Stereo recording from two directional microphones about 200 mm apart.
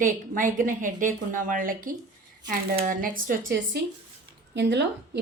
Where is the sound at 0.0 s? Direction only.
40° right (ahead or behind).